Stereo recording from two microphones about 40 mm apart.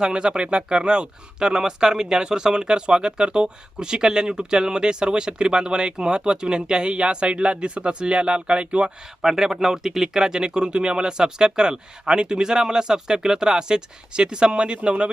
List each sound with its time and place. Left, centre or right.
0.0 s speech: right
9.2 s speech: centre; by 15.1 s right